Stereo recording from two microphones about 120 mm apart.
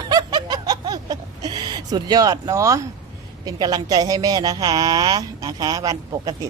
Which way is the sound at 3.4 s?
35° right (ahead or behind).